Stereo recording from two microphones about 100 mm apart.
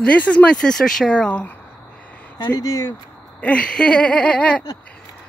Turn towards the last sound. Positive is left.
turn(degrees=10)  # may be behind; listen again after turning